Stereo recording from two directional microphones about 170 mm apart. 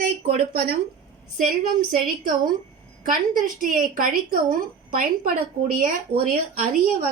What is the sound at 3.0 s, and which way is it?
A woman's voice, 55° right (ahead or behind).